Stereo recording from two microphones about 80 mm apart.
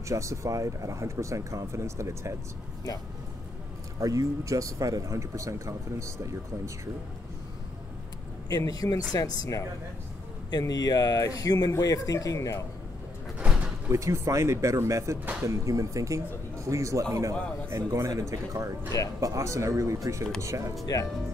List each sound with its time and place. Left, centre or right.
0.1 s speech: right
4.0 s speech: right
8.5 s speech: left
10.7 s speech: left
13.4 s door: centre
13.8 s speech: right
20.8 s speech: left